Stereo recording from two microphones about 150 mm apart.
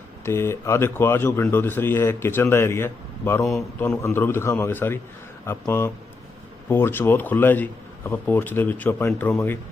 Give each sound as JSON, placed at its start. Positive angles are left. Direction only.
{"t": 0.3, "sound": "speech", "side_deg": 15}